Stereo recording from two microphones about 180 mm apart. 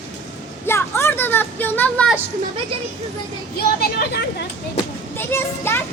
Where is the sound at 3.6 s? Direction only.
60° left (ahead or behind).